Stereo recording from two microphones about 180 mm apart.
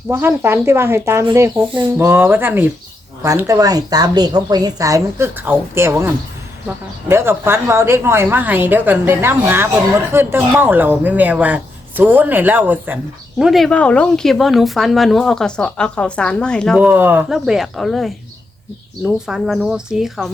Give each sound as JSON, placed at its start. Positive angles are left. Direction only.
{"t": 0.1, "sound": "a woman's voice", "side_deg": -15}
{"t": 13.4, "sound": "speech", "side_deg": 0}
{"t": 16.7, "sound": "speech", "side_deg": -10}